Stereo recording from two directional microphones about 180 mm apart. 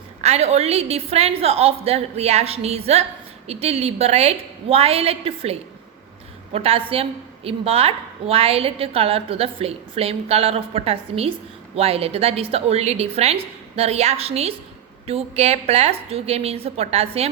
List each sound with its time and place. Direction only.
0.2 s a woman's voice: 35° right (ahead or behind)